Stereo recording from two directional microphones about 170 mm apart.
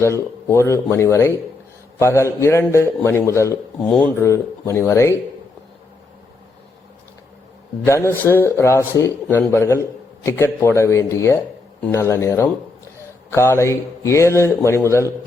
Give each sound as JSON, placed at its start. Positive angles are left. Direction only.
{"t": 0.0, "sound": "speech", "side_deg": 15}
{"t": 7.9, "sound": "speech", "side_deg": 15}